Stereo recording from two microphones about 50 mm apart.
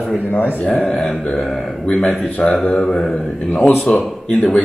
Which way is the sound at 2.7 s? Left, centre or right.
Centre.